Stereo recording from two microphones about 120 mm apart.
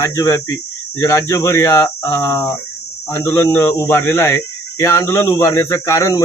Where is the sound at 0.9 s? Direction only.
25° left (ahead or behind).